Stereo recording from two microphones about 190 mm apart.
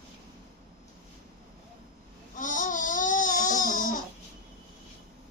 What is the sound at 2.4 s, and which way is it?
Babbling, 45° left (ahead or behind).